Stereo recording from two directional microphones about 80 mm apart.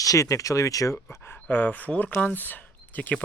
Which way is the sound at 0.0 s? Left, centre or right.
Left.